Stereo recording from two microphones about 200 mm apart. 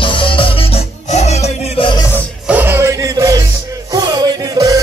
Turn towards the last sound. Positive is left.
turn(degrees=-20)  # may be behind; listen again after turning